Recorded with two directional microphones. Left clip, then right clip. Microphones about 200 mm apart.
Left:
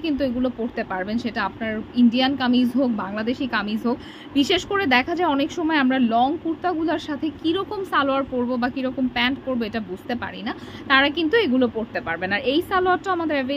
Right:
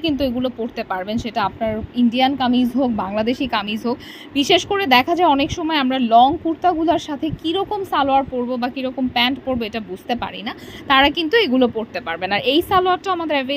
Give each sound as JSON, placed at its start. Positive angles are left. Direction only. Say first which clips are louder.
{"t": 0.0, "sound": "a woman's voice", "louder": "right 3 dB", "side_deg": -15}